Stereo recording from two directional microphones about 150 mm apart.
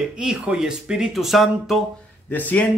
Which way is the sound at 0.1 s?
5° right (ahead or behind).